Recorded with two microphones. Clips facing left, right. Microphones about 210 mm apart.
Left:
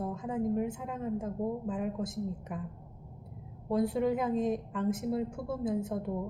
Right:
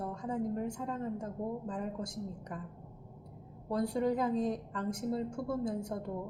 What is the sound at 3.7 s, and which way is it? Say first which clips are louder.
Speech: left 3 dB; 5° left (ahead or behind).